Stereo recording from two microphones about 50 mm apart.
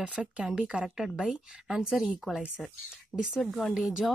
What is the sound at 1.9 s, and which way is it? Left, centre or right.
Speech, centre.